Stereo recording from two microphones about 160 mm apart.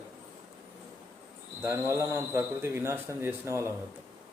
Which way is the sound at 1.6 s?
15° right (ahead or behind).